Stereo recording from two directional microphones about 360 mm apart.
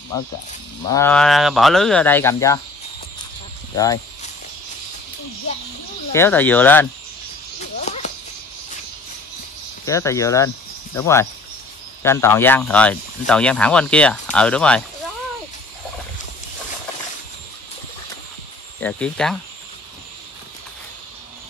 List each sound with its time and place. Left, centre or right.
0.5 s speech: centre
3.7 s speech: centre
6.1 s speech: centre
7.8 s a sound: centre
9.8 s speech: centre
18.8 s speech: centre